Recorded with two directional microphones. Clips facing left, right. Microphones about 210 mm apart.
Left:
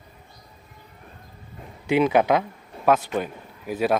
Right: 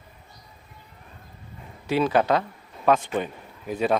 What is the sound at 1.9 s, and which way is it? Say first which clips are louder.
Speech: left 2 dB; 15° left (ahead or behind).